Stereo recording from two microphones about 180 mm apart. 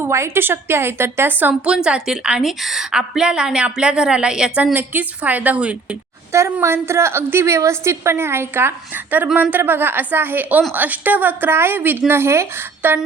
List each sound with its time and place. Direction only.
0.0 s a woman's voice: 15° right (ahead or behind)